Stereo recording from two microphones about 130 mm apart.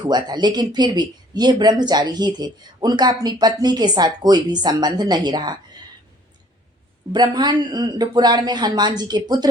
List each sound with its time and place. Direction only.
0.0 s speech: 35° right (ahead or behind)
7.1 s speech: 35° right (ahead or behind)